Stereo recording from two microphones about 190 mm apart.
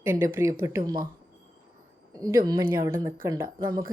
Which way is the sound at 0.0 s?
10° right (ahead or behind).